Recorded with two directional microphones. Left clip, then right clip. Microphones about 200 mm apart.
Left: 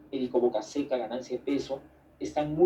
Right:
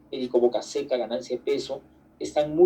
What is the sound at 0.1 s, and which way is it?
A man's voice, 45° right (ahead or behind).